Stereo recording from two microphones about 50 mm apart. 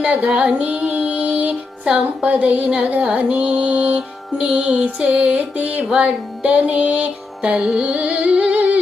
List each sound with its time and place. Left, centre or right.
0.0 s music: right
0.3 s female singing: centre
2.0 s music: right